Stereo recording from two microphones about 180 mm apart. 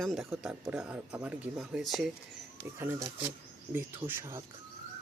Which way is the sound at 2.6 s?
20° right (ahead or behind).